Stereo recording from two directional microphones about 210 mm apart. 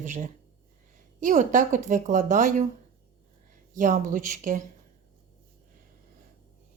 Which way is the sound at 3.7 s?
40° right (ahead or behind).